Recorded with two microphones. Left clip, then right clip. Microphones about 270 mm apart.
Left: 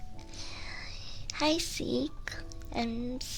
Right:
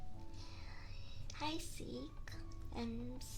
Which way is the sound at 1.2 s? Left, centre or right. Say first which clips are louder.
Left 15 dB; left.